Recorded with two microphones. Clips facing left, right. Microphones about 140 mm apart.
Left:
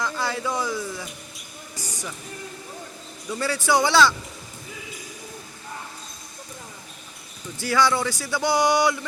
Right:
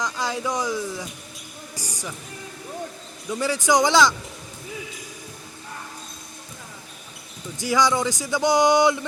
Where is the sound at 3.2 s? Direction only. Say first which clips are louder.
Right 2 dB; 15° right (ahead or behind).